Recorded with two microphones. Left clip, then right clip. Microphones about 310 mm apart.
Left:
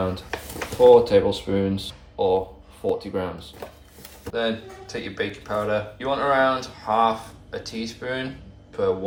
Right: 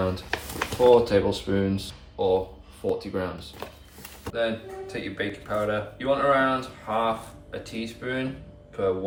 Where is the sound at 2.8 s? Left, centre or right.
Centre.